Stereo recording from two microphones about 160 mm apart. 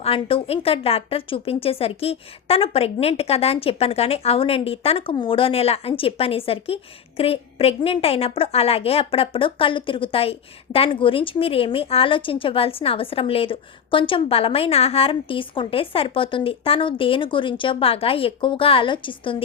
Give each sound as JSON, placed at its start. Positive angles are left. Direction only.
{"t": 0.0, "sound": "a woman's voice", "side_deg": 35}